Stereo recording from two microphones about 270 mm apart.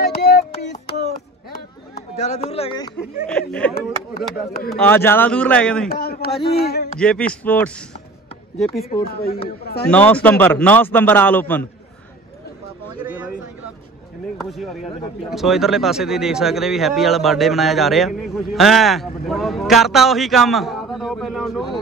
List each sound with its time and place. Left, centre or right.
0.0 s a sound: left
2.1 s speech: left
3.3 s speech: centre
5.9 s a sound: left
6.4 s speech: left
7.0 s speech: centre
9.0 s speech: left
9.8 s a man's voice: centre
13.0 s a sound: centre
14.4 s speech: centre